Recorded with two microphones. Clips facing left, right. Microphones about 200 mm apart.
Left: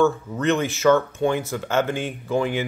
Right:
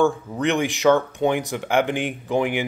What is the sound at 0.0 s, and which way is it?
Speech, 15° right (ahead or behind).